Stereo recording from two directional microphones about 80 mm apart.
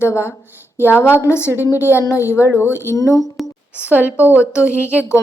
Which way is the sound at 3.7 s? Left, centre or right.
Centre.